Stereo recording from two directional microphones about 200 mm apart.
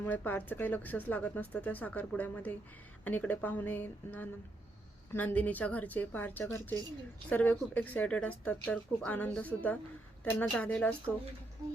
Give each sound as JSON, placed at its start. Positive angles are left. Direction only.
{"t": 0.0, "sound": "a woman's voice", "side_deg": 10}